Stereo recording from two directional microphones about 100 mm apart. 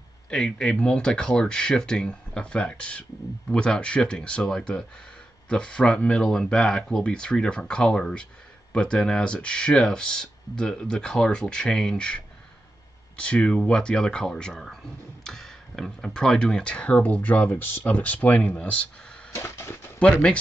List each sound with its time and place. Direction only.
0.3 s speech: 10° left (ahead or behind)
19.3 s a sound: 25° left (ahead or behind)
20.0 s speech: 10° left (ahead or behind)